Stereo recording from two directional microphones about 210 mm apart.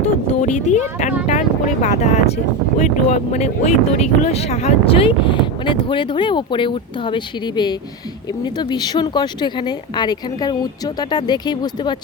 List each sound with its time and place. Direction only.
0.4 s speech: 35° left (ahead or behind)